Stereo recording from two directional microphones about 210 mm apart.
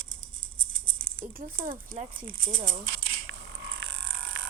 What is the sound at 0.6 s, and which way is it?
Maraca, 70° right (ahead or behind).